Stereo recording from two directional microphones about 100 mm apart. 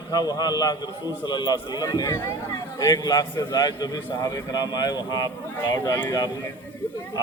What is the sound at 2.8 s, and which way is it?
A man's voice, 40° left (ahead or behind).